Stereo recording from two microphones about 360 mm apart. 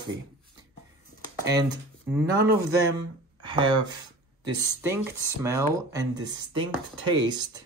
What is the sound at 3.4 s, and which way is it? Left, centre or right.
Speech, centre.